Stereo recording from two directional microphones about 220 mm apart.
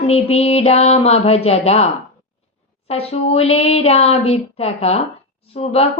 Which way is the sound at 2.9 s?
25° left (ahead or behind).